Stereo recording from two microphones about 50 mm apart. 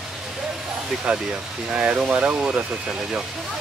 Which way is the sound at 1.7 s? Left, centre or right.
Centre.